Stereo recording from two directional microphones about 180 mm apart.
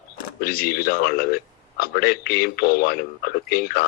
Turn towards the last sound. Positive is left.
turn(degrees=60)  # may be behind; listen again after turning